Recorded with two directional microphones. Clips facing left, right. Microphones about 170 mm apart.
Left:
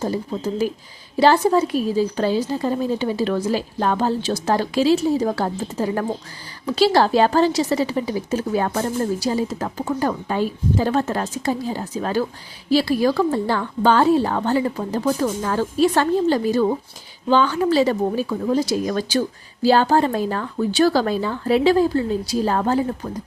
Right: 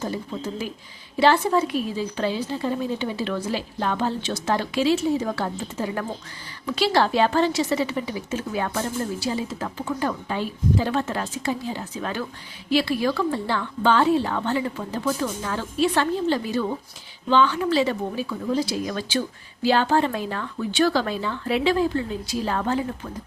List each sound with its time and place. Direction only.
0.0 s a woman's voice: 40° left (ahead or behind)